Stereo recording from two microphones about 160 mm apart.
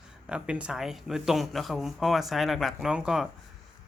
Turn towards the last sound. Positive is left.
turn(degrees=-5)  # may be behind; listen again after turning